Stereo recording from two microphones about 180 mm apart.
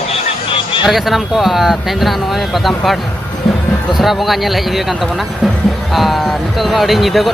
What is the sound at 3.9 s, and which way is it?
Speech, centre (ahead or behind).